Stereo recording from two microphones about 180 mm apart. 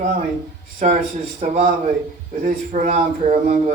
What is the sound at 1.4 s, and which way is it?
Speech, 40° right (ahead or behind).